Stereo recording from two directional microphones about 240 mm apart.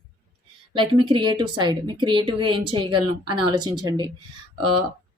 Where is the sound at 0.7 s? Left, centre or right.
Centre.